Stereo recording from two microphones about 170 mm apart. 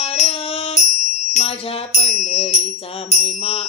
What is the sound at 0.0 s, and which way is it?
Music, 35° left (ahead or behind).